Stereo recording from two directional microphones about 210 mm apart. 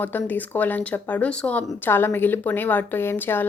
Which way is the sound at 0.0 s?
10° left (ahead or behind).